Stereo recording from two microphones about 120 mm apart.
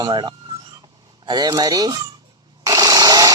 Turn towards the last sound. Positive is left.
turn(degrees=-30)  # may be behind; listen again after turning